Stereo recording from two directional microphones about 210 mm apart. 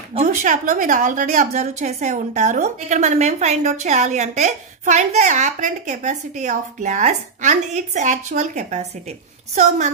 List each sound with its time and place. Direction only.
0.1 s a woman's voice: 35° right (ahead or behind)